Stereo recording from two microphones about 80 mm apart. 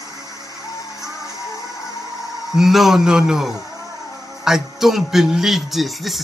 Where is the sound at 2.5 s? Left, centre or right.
Centre.